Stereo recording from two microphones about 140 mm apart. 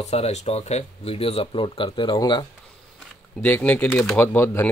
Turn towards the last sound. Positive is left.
turn(degrees=15)  # may be behind; listen again after turning